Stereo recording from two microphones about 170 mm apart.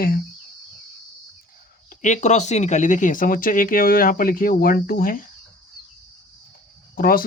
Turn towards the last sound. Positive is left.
turn(degrees=55)  # may be behind; listen again after turning